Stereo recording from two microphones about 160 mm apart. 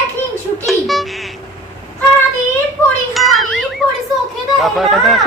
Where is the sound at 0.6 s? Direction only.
Centre (ahead or behind).